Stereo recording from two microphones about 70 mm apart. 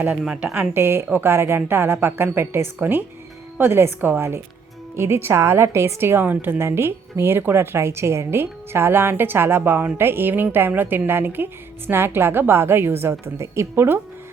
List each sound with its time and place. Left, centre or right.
0.0 s a woman's voice: right